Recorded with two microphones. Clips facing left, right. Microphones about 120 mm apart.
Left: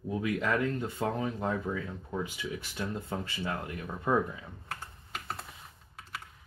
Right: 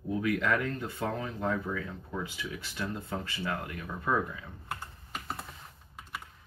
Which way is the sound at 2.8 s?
20° left (ahead or behind).